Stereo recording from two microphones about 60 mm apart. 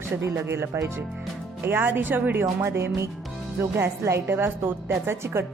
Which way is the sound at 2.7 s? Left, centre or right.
Right.